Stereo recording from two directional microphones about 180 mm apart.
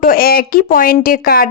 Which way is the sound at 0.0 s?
55° left (ahead or behind).